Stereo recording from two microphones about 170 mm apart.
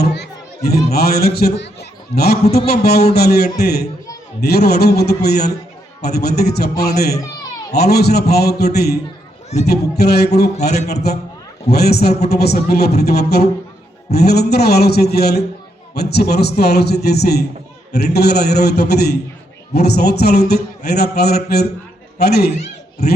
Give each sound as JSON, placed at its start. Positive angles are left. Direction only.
{"t": 0.0, "sound": "music", "side_deg": 75}
{"t": 0.9, "sound": "a man's voice", "side_deg": 70}